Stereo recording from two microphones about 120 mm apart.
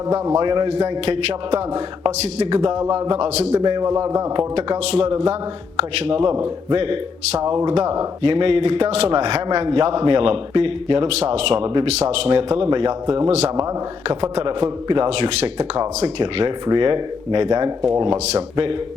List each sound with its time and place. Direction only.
0.1 s a man's voice: 30° right (ahead or behind); by 3.6 s 65° right (ahead or behind)
3.6 s a man's voice: 40° right (ahead or behind)
3.8 s speech: 25° right (ahead or behind)
4.9 s a man's voice: 50° right (ahead or behind)
9.6 s a man's voice: 45° right (ahead or behind)
11.2 s a man's voice: 60° right (ahead or behind)
11.9 s a man's voice: 60° right (ahead or behind)
14.3 s a man's voice: 45° right (ahead or behind)
16.2 s a man's voice: 40° right (ahead or behind)
18.3 s a man's voice: 35° right (ahead or behind)